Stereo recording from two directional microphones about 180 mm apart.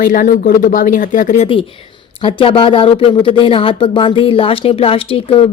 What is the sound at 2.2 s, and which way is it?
Speech, 30° left (ahead or behind).